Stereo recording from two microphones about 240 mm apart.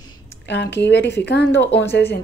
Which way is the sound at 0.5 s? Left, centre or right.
Left.